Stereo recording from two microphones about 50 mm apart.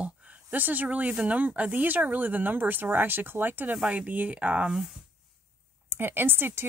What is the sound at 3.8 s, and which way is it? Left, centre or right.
Speech, right.